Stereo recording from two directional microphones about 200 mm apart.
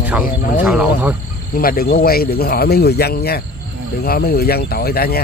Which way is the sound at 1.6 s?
45° left (ahead or behind).